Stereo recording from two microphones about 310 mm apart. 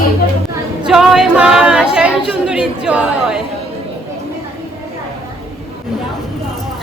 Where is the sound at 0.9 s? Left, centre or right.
Centre.